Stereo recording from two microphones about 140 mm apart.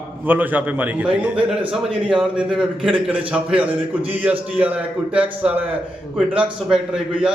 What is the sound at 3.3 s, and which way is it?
A man's voice, 10° right (ahead or behind).